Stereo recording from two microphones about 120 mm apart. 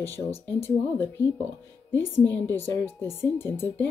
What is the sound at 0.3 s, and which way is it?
Speech, 55° left (ahead or behind).